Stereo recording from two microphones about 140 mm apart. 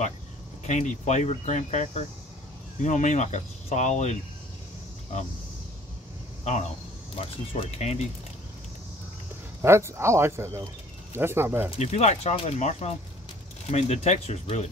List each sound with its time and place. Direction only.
0.7 s speech: 55° left (ahead or behind)
7.2 s speech: 45° left (ahead or behind)
9.6 s speech: 20° right (ahead or behind)
11.8 s speech: 50° left (ahead or behind)